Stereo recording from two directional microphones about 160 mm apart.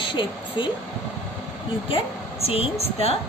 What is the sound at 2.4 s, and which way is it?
Speech, 40° left (ahead or behind).